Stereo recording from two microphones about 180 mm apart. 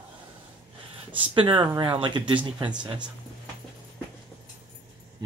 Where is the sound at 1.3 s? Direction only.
25° right (ahead or behind).